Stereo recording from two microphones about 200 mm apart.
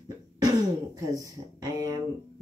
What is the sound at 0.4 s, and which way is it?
Cough, 20° right (ahead or behind).